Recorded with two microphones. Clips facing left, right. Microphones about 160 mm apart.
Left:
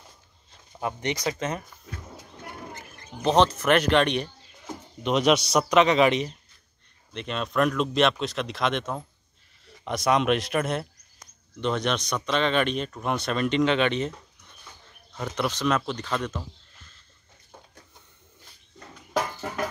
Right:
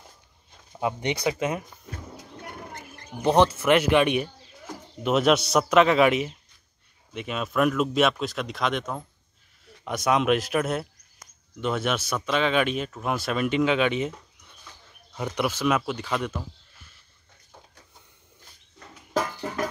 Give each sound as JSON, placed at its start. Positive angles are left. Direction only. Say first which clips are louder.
{"t": 0.5, "sound": "a sound", "louder": "right 3 dB", "side_deg": -15}
{"t": 1.2, "sound": "speech", "louder": "right 5 dB", "side_deg": -10}
{"t": 3.2, "sound": "speech", "louder": "right 1 dB", "side_deg": -10}
{"t": 15.1, "sound": "speech", "louder": "right 1 dB", "side_deg": -15}